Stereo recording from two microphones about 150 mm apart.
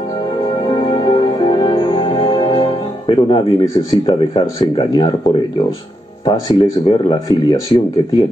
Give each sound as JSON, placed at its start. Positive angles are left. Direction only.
{"t": 0.7, "sound": "music", "side_deg": 35}
{"t": 3.1, "sound": "speech", "side_deg": 35}